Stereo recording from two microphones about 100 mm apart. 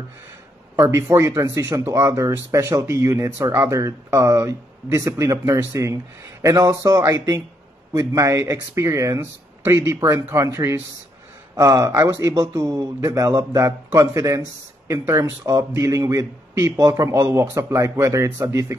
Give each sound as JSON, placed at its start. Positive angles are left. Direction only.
{"t": 0.7, "sound": "speech", "side_deg": -25}